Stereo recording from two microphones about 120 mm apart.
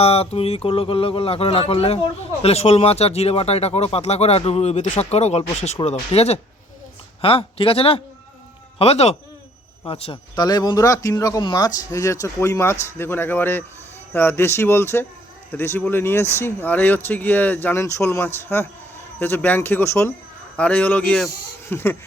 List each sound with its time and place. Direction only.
0.0 s speech: 55° left (ahead or behind)
7.2 s speech: 50° left (ahead or behind)
10.3 s a man's voice: 35° left (ahead or behind); by 21.9 s 20° left (ahead or behind)